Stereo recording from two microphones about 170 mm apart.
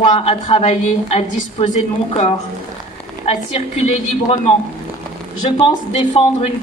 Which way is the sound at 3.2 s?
40° left (ahead or behind).